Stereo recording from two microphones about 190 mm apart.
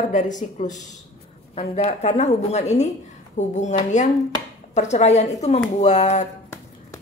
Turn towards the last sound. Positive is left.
turn(degrees=35)  # may be behind; listen again after turning